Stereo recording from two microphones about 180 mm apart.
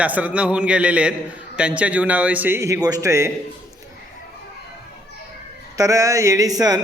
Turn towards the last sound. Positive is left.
turn(degrees=-20)  # may be behind; listen again after turning